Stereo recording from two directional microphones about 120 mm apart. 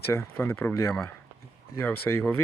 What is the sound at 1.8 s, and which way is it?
Speech, 15° left (ahead or behind).